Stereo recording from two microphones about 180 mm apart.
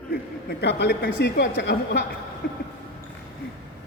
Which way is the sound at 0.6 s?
70° left (ahead or behind).